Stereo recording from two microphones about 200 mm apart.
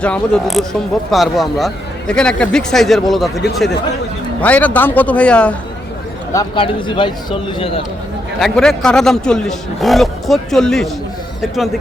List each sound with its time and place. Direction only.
0.0 s a man's voice: 5° left (ahead or behind)
6.3 s a man's voice: 25° left (ahead or behind)
8.4 s speech: centre (ahead or behind)